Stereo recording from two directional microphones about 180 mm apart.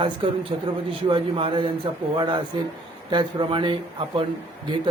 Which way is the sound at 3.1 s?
25° right (ahead or behind).